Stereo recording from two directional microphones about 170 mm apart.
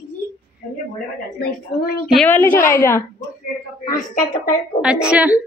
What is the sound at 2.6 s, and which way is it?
Speech, 15° left (ahead or behind).